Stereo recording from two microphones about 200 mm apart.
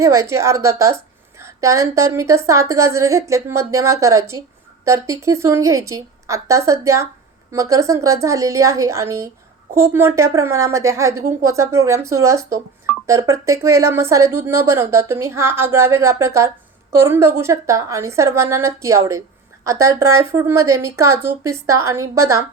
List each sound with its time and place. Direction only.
0.0 s a woman's voice: 15° right (ahead or behind)